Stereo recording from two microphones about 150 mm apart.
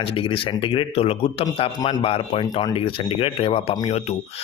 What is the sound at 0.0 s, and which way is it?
A man's voice, 35° left (ahead or behind).